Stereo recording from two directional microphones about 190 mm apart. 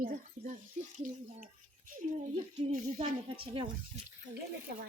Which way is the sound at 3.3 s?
25° right (ahead or behind).